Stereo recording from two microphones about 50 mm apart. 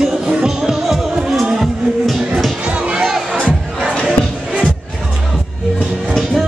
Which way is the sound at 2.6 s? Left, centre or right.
Right.